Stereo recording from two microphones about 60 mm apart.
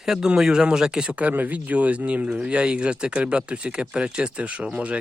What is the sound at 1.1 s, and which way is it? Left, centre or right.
Speech, right.